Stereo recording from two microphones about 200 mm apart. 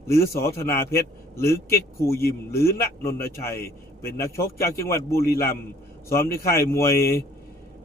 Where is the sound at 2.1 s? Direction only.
50° left (ahead or behind).